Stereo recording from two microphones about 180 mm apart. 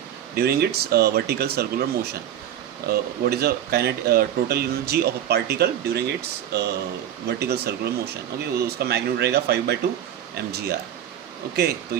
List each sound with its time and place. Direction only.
0.3 s speech: 60° right (ahead or behind)